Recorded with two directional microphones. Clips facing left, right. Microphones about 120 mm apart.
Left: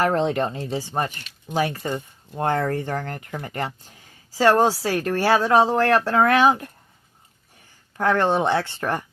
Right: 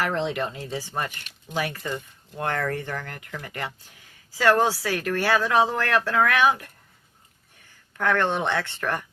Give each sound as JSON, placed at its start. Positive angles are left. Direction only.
{"t": 0.0, "sound": "speech", "side_deg": 45}
{"t": 7.9, "sound": "speech", "side_deg": 30}